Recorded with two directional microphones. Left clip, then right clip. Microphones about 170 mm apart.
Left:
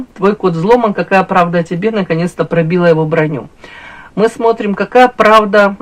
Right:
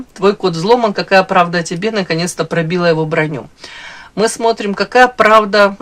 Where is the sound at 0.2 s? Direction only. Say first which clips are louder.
Left 1 dB; 25° right (ahead or behind).